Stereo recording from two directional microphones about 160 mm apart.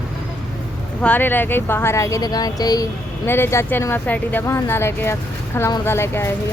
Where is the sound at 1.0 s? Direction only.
10° left (ahead or behind).